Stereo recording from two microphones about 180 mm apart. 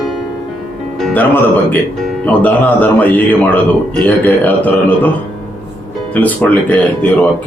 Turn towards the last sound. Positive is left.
turn(degrees=10)  # may be behind; listen again after turning